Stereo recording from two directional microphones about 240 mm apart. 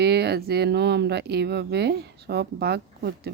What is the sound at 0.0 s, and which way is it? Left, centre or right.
Speech, right.